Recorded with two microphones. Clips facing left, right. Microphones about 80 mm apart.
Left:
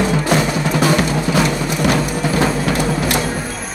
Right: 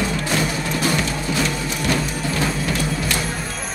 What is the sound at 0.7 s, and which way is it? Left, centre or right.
Music, left.